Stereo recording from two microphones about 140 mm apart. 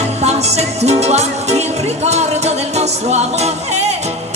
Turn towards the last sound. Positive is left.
turn(degrees=-50)  # may be behind; listen again after turning